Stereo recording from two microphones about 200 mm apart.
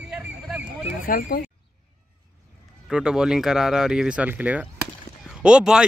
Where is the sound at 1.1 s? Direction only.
50° left (ahead or behind).